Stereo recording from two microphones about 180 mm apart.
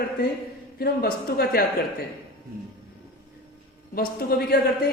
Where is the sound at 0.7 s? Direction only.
60° left (ahead or behind).